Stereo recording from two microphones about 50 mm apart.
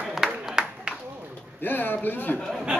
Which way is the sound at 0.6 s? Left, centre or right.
Centre.